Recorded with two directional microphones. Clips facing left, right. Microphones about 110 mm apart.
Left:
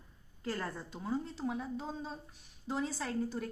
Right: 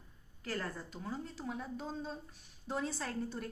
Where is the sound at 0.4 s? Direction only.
20° left (ahead or behind).